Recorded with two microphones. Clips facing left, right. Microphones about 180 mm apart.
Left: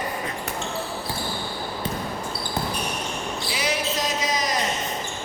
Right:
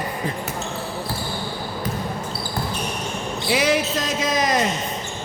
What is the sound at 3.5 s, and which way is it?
Basketball bounce, 60° right (ahead or behind).